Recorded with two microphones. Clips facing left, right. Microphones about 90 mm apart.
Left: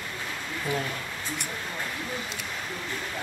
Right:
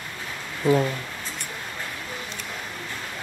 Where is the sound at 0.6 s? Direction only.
30° right (ahead or behind).